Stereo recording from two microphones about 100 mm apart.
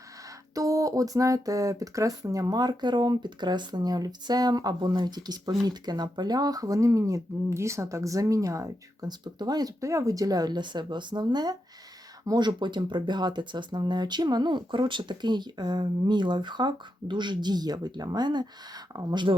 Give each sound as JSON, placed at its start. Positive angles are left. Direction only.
{"t": 0.5, "sound": "speech", "side_deg": -35}